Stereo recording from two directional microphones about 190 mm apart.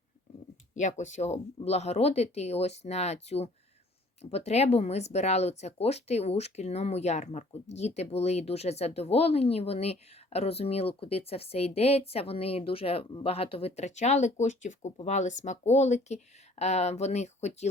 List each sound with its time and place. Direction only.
0.8 s speech: 40° left (ahead or behind)